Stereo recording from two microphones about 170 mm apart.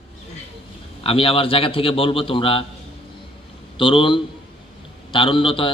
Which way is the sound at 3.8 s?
30° left (ahead or behind).